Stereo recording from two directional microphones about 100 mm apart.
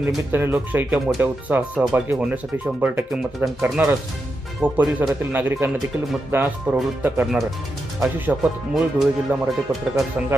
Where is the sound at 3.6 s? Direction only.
20° right (ahead or behind).